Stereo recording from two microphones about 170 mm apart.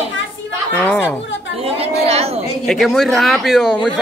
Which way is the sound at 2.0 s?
35° right (ahead or behind).